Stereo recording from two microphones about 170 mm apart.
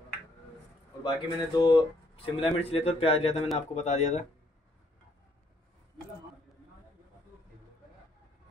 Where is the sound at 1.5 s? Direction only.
25° left (ahead or behind).